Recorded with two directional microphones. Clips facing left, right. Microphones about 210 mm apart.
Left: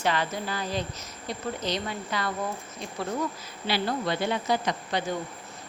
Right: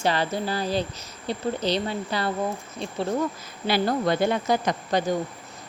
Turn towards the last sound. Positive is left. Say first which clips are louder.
# right 5 dB
turn(degrees=-45)  # may be behind; listen again after turning